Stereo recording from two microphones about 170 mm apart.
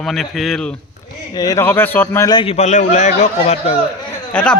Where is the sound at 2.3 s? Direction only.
35° left (ahead or behind).